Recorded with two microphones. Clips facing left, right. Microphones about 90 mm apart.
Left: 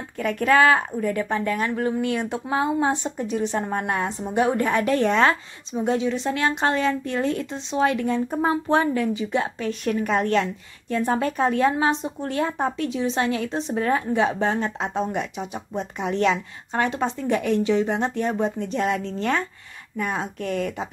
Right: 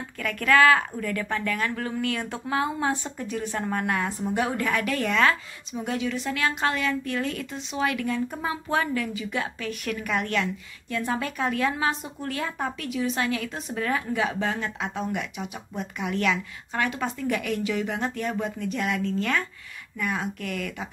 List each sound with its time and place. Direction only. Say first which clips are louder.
0.2 s a woman's voice: left 2 dB; 25° left (ahead or behind)